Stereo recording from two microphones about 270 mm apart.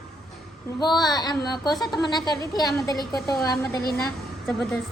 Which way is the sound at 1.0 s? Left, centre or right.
Centre.